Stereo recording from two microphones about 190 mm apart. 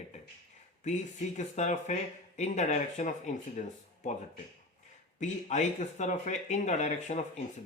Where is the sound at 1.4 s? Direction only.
40° left (ahead or behind).